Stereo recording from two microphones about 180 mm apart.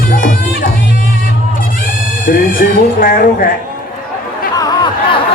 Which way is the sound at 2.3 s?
50° left (ahead or behind).